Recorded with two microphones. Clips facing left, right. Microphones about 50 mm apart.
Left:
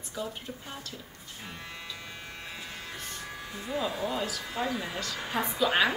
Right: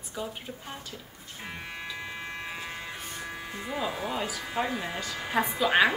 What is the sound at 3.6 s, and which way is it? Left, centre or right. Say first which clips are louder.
Speech: left 1 dB; centre.